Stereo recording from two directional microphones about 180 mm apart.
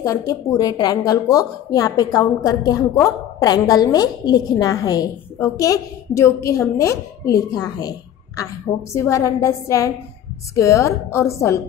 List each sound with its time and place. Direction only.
0.0 s speech: 20° left (ahead or behind)
8.9 s a woman's voice: 15° left (ahead or behind)